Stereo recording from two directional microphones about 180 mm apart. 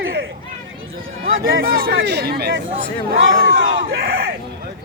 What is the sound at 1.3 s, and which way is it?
Speech, 55° right (ahead or behind).